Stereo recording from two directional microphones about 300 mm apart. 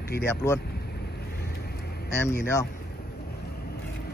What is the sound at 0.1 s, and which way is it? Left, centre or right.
Speech, left.